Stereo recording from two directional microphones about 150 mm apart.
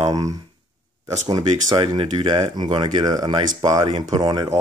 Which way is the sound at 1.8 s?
35° right (ahead or behind).